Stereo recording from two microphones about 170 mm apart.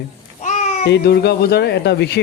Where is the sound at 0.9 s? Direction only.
70° left (ahead or behind); by 2.1 s 90° left.